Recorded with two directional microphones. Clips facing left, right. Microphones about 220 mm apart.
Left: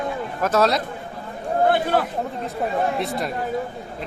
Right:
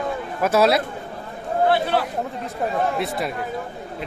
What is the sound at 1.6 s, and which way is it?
Speech, 50° left (ahead or behind).